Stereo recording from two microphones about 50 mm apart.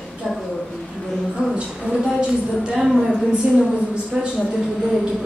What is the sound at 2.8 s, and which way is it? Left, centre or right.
Speech, centre.